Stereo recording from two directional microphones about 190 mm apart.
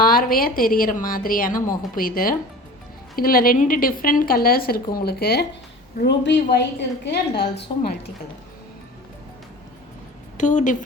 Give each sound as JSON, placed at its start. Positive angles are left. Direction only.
{"t": 0.0, "sound": "a woman's voice", "side_deg": 50}
{"t": 10.3, "sound": "a woman's voice", "side_deg": 40}